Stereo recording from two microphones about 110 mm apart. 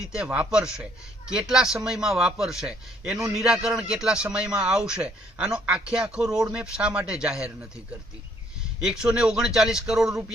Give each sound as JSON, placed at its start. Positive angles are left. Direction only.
{"t": 0.0, "sound": "a man's voice", "side_deg": -5}
{"t": 8.8, "sound": "a man's voice", "side_deg": -10}